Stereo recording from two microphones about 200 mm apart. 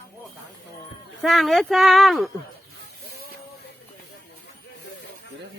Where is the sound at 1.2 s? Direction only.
Centre (ahead or behind).